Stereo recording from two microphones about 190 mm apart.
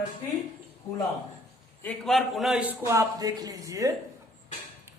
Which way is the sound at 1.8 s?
Centre (ahead or behind).